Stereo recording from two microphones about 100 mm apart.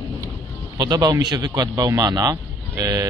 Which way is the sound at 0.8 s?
35° right (ahead or behind).